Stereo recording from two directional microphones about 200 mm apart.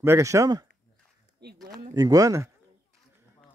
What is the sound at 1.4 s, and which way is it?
Speech, 55° right (ahead or behind).